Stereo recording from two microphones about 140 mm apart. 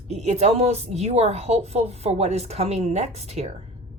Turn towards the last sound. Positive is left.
turn(degrees=-50)  # may be behind; listen again after turning